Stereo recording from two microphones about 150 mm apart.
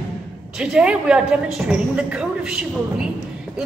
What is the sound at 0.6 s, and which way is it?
A woman's voice, 5° right (ahead or behind).